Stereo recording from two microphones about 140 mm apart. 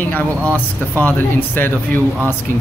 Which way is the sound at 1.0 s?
15° left (ahead or behind).